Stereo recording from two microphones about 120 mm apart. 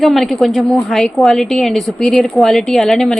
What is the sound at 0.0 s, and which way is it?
A woman's voice, centre (ahead or behind).